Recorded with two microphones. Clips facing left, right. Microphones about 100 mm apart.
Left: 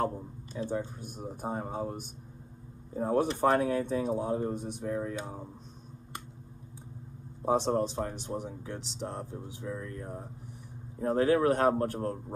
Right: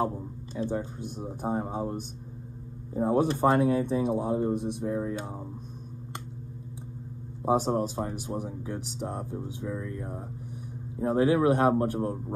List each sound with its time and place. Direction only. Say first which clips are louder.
0.7 s speech: right 2 dB; 15° right (ahead or behind)
7.4 s speech: right 2 dB; 10° right (ahead or behind)